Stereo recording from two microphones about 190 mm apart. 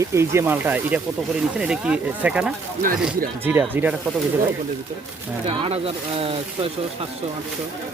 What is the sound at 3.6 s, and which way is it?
Speech, 10° right (ahead or behind).